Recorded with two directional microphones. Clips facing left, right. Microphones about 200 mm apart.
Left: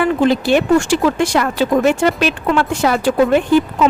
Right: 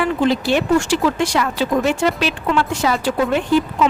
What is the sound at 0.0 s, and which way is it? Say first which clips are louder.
A woman's voice: left 3 dB; 50° left (ahead or behind).